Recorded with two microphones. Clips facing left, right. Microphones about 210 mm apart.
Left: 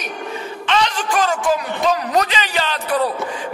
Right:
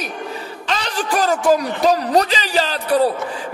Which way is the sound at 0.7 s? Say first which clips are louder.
Left 2 dB; 40° right (ahead or behind).